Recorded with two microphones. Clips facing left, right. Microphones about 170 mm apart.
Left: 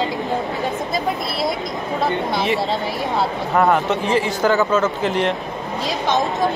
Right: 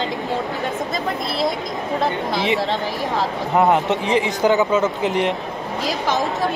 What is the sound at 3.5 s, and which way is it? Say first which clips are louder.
A man's voice: even; 20° right (ahead or behind).